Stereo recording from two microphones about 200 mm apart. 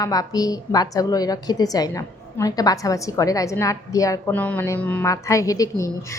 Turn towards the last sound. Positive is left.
turn(degrees=15)  # may be behind; listen again after turning